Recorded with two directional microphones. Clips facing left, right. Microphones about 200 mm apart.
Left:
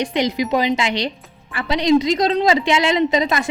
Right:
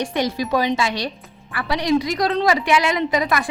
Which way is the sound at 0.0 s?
20° left (ahead or behind).